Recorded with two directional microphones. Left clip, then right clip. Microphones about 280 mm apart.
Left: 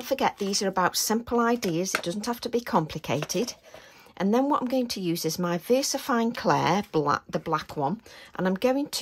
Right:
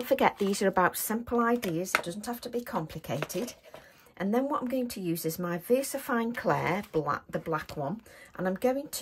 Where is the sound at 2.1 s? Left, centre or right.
Centre.